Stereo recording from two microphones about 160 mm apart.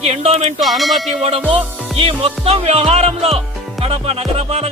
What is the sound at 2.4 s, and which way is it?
Speech, 35° right (ahead or behind).